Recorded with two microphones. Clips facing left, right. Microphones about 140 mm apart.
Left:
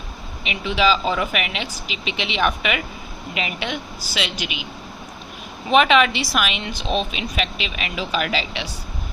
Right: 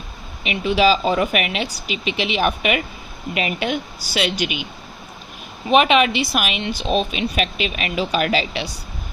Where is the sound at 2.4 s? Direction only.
30° right (ahead or behind).